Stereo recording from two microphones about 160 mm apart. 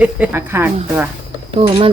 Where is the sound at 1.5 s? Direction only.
35° right (ahead or behind).